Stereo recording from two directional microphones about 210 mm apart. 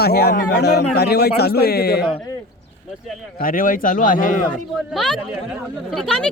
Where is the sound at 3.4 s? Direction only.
40° left (ahead or behind).